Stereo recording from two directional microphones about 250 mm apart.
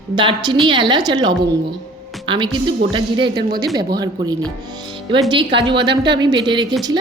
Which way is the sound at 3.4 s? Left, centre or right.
Right.